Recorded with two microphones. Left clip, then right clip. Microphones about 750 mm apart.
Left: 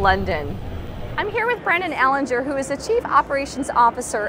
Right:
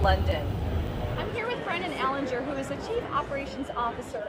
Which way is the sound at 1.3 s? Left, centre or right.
Left.